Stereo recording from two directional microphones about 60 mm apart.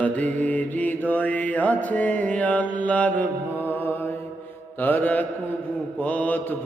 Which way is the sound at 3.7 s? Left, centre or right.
Left.